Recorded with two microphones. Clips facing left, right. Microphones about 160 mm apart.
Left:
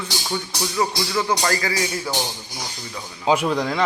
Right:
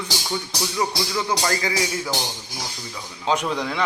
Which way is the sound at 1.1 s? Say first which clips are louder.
Left 4 dB; 15° right (ahead or behind).